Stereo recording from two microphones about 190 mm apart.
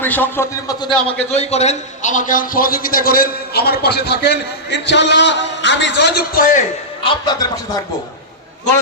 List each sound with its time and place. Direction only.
0.0 s a man's voice: 10° left (ahead or behind)
1.4 s a man's voice: 35° left (ahead or behind); by 6.6 s 55° left (ahead or behind)
7.0 s speech: 20° left (ahead or behind)